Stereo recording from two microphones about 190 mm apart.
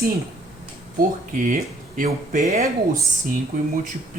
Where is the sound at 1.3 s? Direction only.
45° right (ahead or behind).